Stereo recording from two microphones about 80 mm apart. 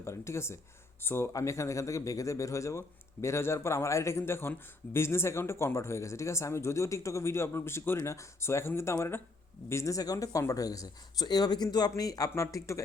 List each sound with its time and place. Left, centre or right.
0.0 s speech: left
1.3 s speech: left